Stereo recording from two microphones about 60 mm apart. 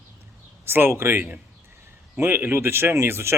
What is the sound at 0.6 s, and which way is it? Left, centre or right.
Speech, right.